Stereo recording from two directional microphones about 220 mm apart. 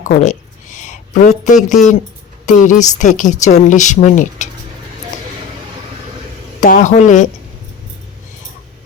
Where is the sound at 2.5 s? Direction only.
35° left (ahead or behind).